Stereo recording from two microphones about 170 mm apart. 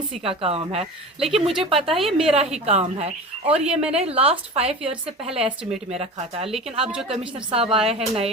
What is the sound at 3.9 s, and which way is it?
A woman's voice, 35° right (ahead or behind).